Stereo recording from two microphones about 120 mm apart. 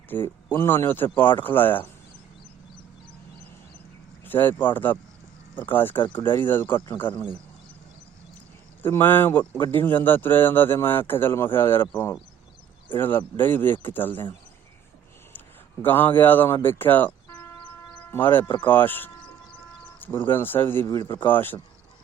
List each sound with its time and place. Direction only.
0.1 s speech: 15° left (ahead or behind)
4.3 s speech: 15° left (ahead or behind)
6.7 s speech: 40° left (ahead or behind)
8.8 s speech: 20° left (ahead or behind)
9.4 s speech: 40° left (ahead or behind)
9.7 s speech: 15° left (ahead or behind)
13.0 s speech: 15° left (ahead or behind)
15.8 s speech: 15° left (ahead or behind)
16.6 s a sound: 15° left (ahead or behind)
18.1 s speech: 15° left (ahead or behind)
20.8 s speech: 30° left (ahead or behind)
21.2 s speech: 15° left (ahead or behind)